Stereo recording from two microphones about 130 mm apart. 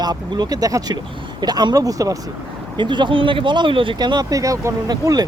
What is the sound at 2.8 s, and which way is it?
Speech, 35° right (ahead or behind).